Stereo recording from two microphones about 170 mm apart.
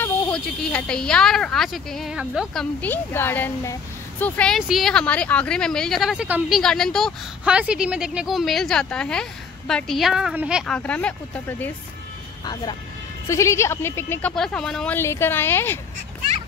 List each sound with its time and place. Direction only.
0.0 s a woman's voice: 5° left (ahead or behind)
6.6 s a woman's voice: 5° left (ahead or behind)
10.7 s speech: 5° left (ahead or behind)
13.3 s speech: 15° left (ahead or behind)
14.3 s a woman's voice: 5° left (ahead or behind)
15.0 s speech: 15° left (ahead or behind)